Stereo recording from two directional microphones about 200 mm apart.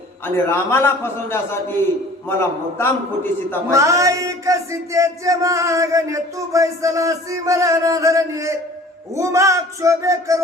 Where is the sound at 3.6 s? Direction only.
15° right (ahead or behind).